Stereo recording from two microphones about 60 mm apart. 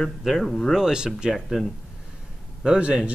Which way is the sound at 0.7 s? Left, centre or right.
Centre.